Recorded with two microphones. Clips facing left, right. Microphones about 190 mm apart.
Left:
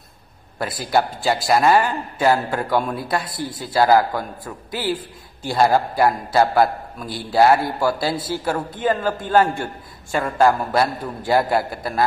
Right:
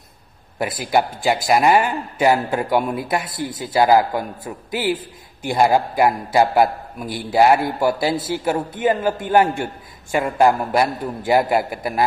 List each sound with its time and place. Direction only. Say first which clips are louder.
0.6 s a man's voice: right 1 dB; 15° right (ahead or behind)